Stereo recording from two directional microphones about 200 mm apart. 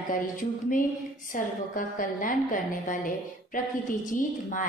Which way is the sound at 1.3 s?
40° left (ahead or behind).